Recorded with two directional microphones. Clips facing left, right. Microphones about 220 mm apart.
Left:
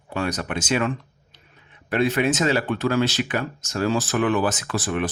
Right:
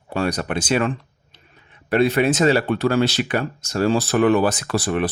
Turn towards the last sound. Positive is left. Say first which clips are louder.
# right 4 dB
turn(degrees=-35)  # may be behind; listen again after turning